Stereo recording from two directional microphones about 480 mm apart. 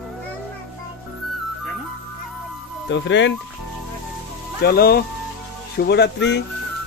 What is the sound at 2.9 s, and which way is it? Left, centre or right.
Speech, left.